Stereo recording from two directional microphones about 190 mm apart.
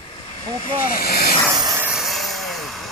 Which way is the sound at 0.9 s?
50° left (ahead or behind).